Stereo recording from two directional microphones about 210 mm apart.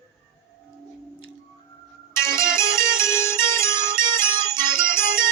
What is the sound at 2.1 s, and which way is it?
Music, 15° left (ahead or behind).